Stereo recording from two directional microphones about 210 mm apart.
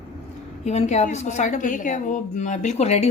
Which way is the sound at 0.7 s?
30° left (ahead or behind).